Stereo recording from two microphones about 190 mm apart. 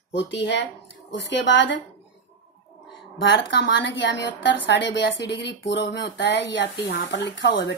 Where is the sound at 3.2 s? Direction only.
70° left (ahead or behind).